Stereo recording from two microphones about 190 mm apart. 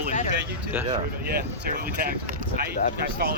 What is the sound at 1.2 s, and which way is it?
Speech, 55° right (ahead or behind).